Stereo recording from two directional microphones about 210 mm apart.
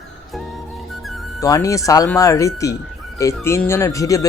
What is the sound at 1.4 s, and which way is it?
Speech, 15° left (ahead or behind).